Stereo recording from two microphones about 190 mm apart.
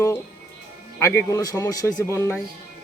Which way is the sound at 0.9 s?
15° left (ahead or behind).